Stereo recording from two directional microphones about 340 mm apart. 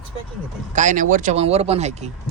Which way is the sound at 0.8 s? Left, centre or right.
Right.